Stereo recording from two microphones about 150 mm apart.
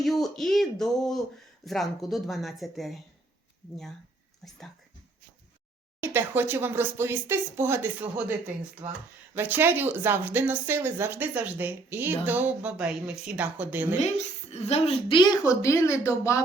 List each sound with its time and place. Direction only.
0.0 s speech: centre (ahead or behind)
4.4 s speech: centre (ahead or behind)
6.0 s speech: 15° right (ahead or behind)
14.5 s speech: 45° left (ahead or behind); by 16.4 s 20° left (ahead or behind)